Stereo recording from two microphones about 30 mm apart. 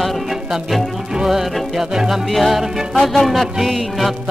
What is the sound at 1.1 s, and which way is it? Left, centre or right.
Music, centre.